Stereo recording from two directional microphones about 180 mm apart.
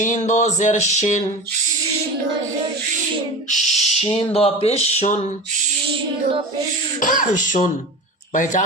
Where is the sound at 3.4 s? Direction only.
40° left (ahead or behind).